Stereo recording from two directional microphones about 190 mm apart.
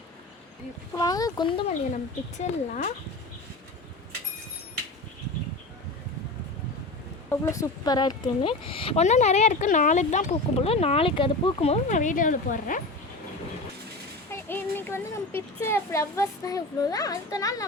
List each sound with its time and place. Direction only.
0.9 s speech: 20° left (ahead or behind)
2.4 s speech: 40° left (ahead or behind)
7.3 s speech: 15° left (ahead or behind); by 12.8 s 45° left (ahead or behind)
14.3 s a child's voice: 10° left (ahead or behind)